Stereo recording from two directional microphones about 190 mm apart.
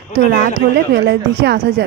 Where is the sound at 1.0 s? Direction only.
55° right (ahead or behind).